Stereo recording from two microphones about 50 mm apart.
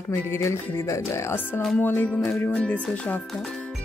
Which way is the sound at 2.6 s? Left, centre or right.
Left.